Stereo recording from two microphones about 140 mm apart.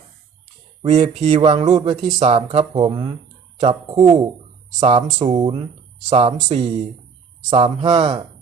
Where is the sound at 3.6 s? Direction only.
50° right (ahead or behind).